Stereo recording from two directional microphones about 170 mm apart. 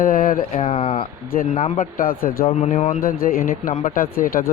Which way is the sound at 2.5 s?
45° left (ahead or behind).